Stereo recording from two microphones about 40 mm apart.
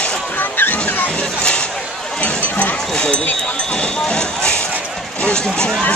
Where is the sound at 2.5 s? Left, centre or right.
Left.